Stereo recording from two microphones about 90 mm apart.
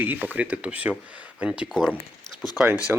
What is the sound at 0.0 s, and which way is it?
Speech, 20° right (ahead or behind).